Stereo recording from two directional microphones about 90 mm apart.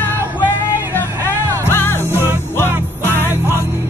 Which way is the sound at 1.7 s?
25° left (ahead or behind).